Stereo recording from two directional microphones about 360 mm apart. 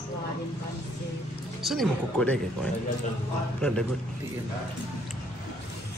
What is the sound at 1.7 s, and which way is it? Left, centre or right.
Speech, centre.